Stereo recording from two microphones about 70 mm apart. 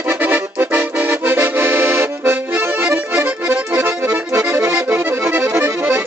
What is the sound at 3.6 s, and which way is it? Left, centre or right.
Accordion, right.